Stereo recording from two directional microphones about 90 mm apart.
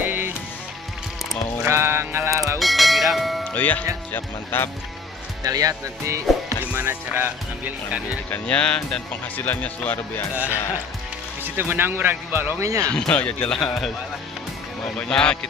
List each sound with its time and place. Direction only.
0.0 s music: 20° right (ahead or behind)
1.6 s music: 25° right (ahead or behind)
2.6 s music: centre (ahead or behind)
3.5 s speech: 20° left (ahead or behind)
5.4 s speech: 40° right (ahead or behind)
6.7 s speech: 20° right (ahead or behind)
8.3 s speech: 15° left (ahead or behind)
11.4 s speech: 25° right (ahead or behind)
12.8 s speech: 10° left (ahead or behind)
15.0 s speech: 10° left (ahead or behind)